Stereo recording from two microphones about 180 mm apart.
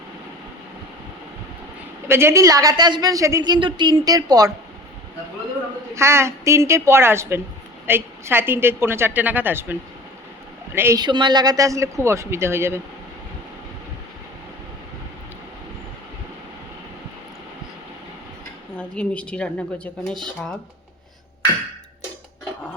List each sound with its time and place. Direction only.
2.0 s a woman's voice: 15° right (ahead or behind)
5.9 s a man's voice: 15° right (ahead or behind)
10.8 s a man's voice: 15° right (ahead or behind)
18.8 s speech: 5° left (ahead or behind)